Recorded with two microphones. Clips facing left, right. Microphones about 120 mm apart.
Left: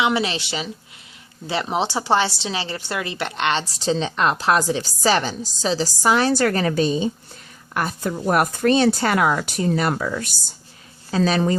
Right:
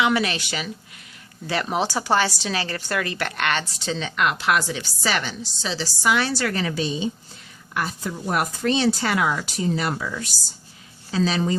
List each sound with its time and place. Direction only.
0.0 s a woman's voice: 25° left (ahead or behind)
3.6 s a woman's voice: 35° left (ahead or behind); by 11.5 s 50° left (ahead or behind)